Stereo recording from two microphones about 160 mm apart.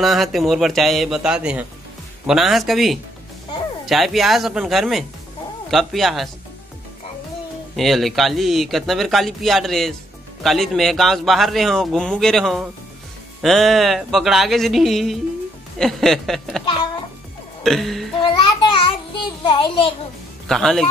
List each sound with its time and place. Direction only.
0.0 s speech: centre (ahead or behind)
7.7 s speech: centre (ahead or behind)
16.6 s a child's voice: 30° left (ahead or behind)
17.6 s speech: centre (ahead or behind)
18.2 s a child's voice: 30° left (ahead or behind)
20.4 s speech: 5° left (ahead or behind)